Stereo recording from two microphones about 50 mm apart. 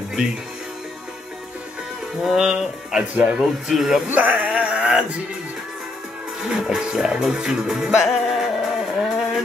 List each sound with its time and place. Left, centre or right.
2.2 s speech: centre
4.1 s speech: right
4.5 s a sound: right
6.5 s speech: centre
8.1 s music: centre